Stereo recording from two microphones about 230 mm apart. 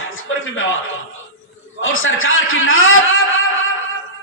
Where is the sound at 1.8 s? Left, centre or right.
Left.